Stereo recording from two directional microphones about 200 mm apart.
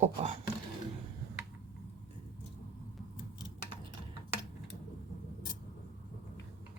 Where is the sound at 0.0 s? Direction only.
30° right (ahead or behind).